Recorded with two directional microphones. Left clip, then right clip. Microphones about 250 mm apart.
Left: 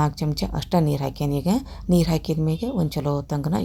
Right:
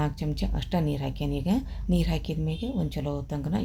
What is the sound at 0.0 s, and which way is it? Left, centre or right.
Speech, left.